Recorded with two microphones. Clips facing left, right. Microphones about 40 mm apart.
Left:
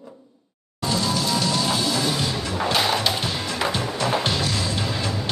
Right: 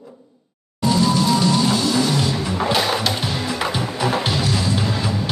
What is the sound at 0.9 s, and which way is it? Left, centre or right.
Music, centre.